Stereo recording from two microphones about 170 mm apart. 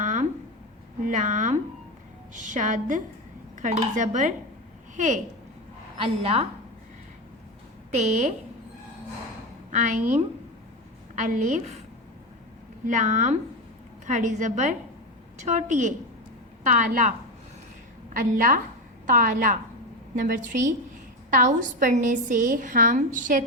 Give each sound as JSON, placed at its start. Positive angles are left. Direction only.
{"t": 0.0, "sound": "a sound", "side_deg": -45}
{"t": 1.0, "sound": "a woman's voice", "side_deg": -45}
{"t": 6.0, "sound": "a woman's voice", "side_deg": -35}
{"t": 7.9, "sound": "a woman's voice", "side_deg": -45}
{"t": 11.1, "sound": "a woman's voice", "side_deg": -45}
{"t": 12.8, "sound": "a woman's voice", "side_deg": -45}